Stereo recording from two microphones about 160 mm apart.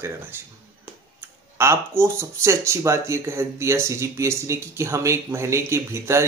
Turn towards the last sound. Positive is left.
turn(degrees=-15)  # may be behind; listen again after turning